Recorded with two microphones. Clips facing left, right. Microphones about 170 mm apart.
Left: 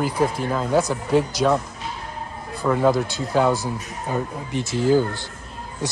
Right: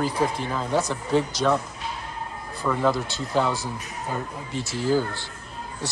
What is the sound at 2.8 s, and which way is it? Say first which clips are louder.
Speech: left 4 dB; 15° left (ahead or behind).